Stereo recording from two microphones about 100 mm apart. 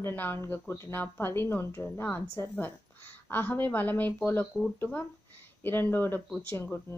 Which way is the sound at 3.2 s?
20° left (ahead or behind).